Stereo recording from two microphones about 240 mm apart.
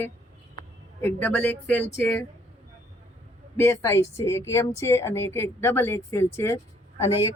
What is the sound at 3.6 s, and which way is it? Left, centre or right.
Speech, centre.